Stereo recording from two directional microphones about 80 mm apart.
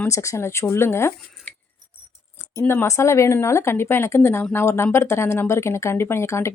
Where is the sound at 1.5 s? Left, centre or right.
Centre.